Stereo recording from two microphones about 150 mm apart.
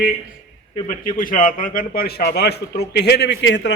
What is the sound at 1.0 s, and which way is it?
A man's voice, 65° left (ahead or behind).